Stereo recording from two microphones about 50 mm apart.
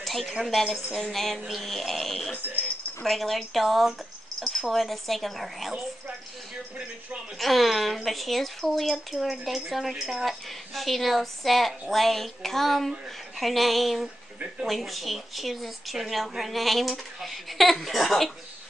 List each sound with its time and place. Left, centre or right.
0.0 s speech: centre
7.3 s speech: centre